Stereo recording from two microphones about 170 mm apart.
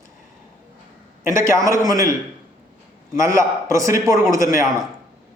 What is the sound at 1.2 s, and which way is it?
Speech, 15° right (ahead or behind).